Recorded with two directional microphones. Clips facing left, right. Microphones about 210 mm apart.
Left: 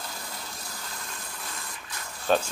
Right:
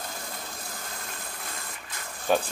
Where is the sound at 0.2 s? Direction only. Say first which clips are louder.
Right 1 dB; 50° right (ahead or behind).